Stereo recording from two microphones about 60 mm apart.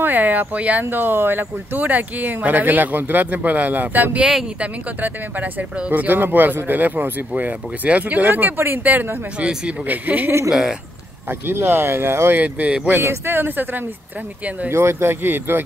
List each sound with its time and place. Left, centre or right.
0.0 s speech: right
8.8 s speech: right
10.5 s speech: centre
11.2 s speech: right
12.4 s speech: right
13.0 s speech: right